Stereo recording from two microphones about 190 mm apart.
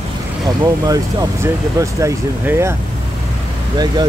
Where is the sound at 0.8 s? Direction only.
20° right (ahead or behind).